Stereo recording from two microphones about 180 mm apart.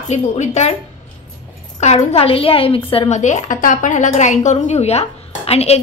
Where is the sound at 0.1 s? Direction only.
40° left (ahead or behind).